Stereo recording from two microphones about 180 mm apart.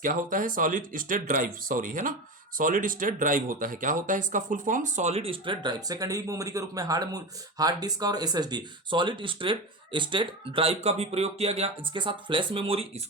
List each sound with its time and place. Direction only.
0.0 s speech: 50° right (ahead or behind); by 12.9 s 30° right (ahead or behind)